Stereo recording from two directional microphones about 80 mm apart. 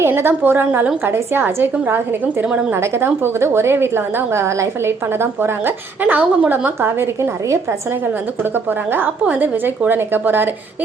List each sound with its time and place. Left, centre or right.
0.0 s a woman's voice: right
2.4 s a woman's voice: centre
2.7 s a woman's voice: right